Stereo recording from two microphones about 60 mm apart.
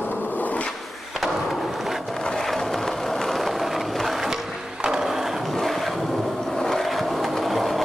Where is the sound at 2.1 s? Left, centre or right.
Centre.